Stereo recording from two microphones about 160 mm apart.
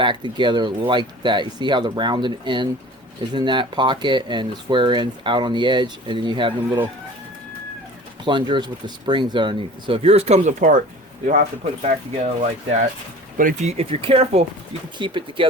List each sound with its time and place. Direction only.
0.0 s speech: 30° right (ahead or behind)
8.2 s speech: 30° right (ahead or behind); by 12.9 s 50° right (ahead or behind)
13.3 s speech: 60° right (ahead or behind)
13.7 s speech: 40° right (ahead or behind)